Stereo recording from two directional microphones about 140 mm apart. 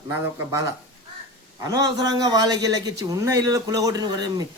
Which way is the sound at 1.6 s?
25° right (ahead or behind).